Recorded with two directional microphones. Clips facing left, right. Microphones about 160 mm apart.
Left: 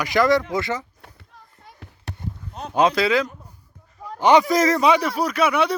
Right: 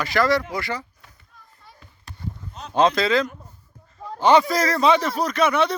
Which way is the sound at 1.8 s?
70° left (ahead or behind).